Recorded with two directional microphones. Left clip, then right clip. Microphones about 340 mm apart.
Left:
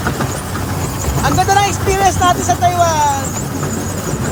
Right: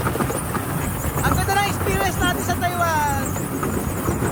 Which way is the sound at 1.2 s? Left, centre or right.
Centre.